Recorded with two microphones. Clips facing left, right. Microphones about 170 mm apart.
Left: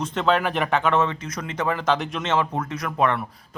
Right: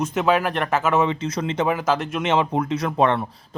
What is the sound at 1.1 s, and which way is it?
Speech, 25° right (ahead or behind).